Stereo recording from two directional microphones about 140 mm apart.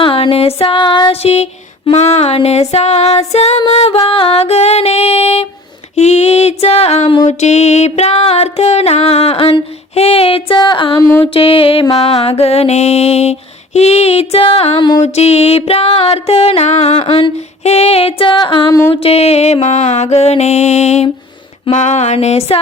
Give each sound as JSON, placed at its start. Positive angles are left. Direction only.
{"t": 0.0, "sound": "music", "side_deg": 40}
{"t": 11.3, "sound": "music", "side_deg": 40}